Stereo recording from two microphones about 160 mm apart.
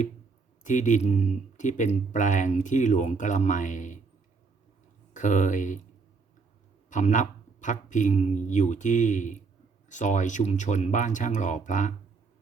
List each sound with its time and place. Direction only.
0.6 s speech: 50° left (ahead or behind)
5.1 s speech: 50° left (ahead or behind)
6.9 s speech: 50° left (ahead or behind)